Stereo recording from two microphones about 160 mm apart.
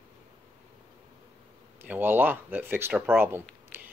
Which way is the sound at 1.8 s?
10° right (ahead or behind).